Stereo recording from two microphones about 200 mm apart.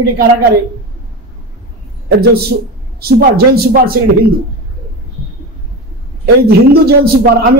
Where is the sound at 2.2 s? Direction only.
50° right (ahead or behind).